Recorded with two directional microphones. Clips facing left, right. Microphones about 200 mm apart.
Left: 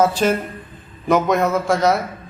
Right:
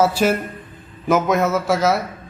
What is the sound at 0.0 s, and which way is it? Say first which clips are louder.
A man's voice: even; 10° right (ahead or behind).